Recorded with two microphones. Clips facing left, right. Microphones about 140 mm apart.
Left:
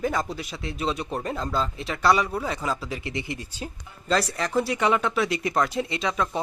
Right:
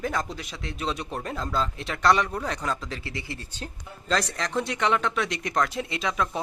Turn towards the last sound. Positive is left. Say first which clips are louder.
# left 1 dB
turn(degrees=0)  # may be behind; listen again after turning